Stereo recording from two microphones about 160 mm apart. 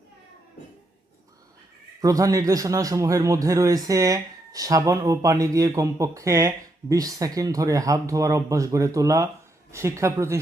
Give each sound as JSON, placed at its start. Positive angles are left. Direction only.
{"t": 2.0, "sound": "a man's voice", "side_deg": -20}